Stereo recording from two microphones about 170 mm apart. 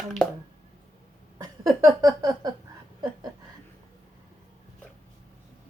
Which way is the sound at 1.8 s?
20° right (ahead or behind).